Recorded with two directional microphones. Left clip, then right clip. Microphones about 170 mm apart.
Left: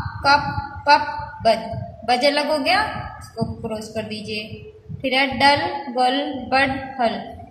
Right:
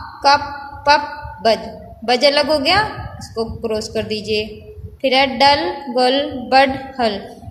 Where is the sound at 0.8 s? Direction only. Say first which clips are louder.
Right 2 dB; 60° right (ahead or behind).